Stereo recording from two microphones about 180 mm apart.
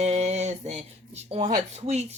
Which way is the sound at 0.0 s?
40° right (ahead or behind).